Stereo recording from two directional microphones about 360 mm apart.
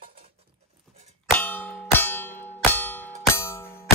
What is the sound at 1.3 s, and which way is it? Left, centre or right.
Clang, centre.